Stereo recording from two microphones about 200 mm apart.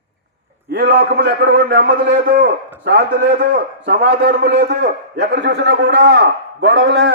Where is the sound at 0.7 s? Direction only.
50° right (ahead or behind).